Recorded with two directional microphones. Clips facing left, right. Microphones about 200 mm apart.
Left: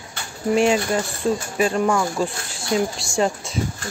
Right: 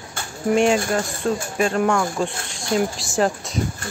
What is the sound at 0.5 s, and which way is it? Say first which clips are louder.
Speech: even; centre (ahead or behind).